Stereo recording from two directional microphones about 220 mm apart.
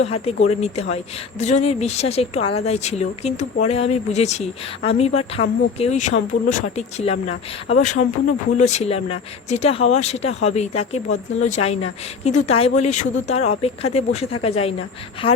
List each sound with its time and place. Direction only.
0.0 s speech: 25° left (ahead or behind)